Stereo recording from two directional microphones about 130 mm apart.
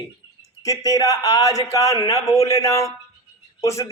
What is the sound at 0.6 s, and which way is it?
A man's voice, 25° left (ahead or behind).